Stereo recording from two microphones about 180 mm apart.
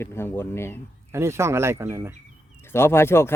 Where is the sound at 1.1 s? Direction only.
15° right (ahead or behind).